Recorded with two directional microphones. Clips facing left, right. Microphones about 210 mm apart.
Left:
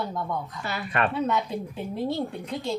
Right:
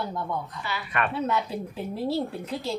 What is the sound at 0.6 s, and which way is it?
Speech, 45° left (ahead or behind).